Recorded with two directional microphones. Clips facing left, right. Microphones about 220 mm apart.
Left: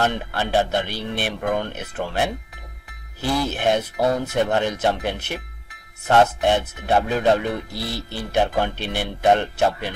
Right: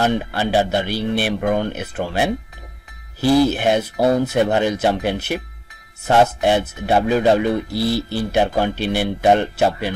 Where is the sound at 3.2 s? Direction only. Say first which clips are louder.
Right 9 dB; 35° right (ahead or behind).